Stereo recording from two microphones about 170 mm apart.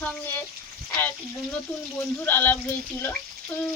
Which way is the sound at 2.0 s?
10° left (ahead or behind).